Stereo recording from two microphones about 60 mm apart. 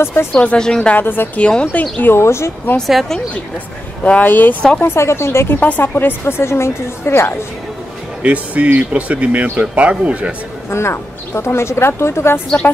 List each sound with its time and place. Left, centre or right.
0.0 s speech: left
0.3 s speech: left
0.9 s a woman's voice: left
1.3 s speech: centre
2.0 s speech: left
2.9 s a woman's voice: centre
4.0 s a woman's voice: left
4.8 s speech: left
5.6 s a woman's voice: left
8.2 s speech: right
10.7 s speech: left